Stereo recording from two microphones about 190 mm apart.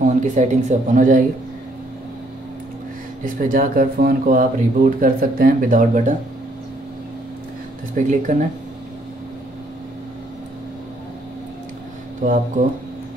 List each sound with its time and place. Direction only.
0.0 s speech: 40° right (ahead or behind)
3.3 s speech: 45° right (ahead or behind)
7.9 s speech: 40° right (ahead or behind)
12.2 s speech: 40° right (ahead or behind)